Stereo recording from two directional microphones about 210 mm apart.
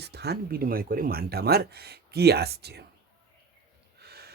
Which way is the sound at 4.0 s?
50° right (ahead or behind).